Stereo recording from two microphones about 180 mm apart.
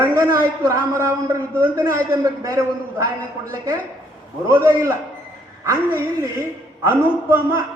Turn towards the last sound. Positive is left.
turn(degrees=-10)  # may be behind; listen again after turning